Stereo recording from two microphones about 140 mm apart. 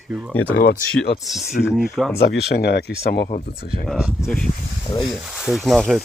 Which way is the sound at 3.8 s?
Centre (ahead or behind).